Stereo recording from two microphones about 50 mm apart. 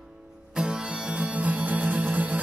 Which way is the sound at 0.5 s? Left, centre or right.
Centre.